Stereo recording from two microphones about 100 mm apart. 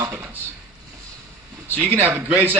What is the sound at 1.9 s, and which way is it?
Speech, 20° right (ahead or behind).